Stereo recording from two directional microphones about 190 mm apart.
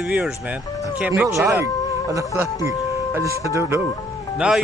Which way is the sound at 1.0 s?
15° right (ahead or behind).